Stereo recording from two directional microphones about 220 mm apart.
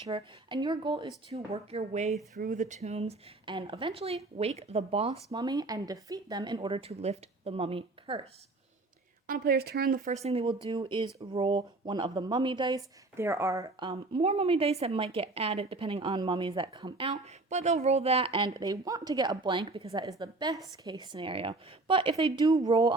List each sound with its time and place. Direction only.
0.1 s speech: 20° right (ahead or behind)
9.2 s speech: 40° right (ahead or behind); by 23.0 s 20° right (ahead or behind)